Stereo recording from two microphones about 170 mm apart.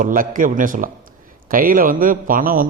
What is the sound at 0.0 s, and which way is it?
A man's voice, 55° right (ahead or behind).